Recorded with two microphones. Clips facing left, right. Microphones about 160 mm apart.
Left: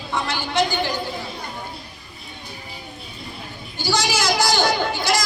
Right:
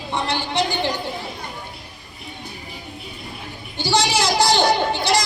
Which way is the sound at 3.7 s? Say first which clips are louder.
Right 2 dB; 30° right (ahead or behind).